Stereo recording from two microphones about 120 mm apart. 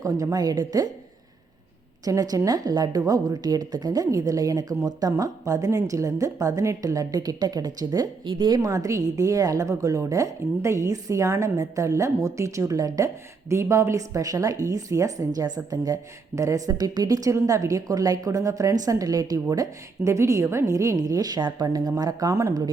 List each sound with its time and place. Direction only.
0.0 s speech: 30° right (ahead or behind)
2.0 s speech: 30° right (ahead or behind)